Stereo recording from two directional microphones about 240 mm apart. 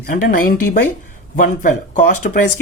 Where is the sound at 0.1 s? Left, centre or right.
Left.